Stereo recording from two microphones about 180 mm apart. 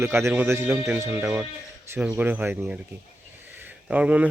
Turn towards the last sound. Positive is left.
turn(degrees=-5)  # may be behind; listen again after turning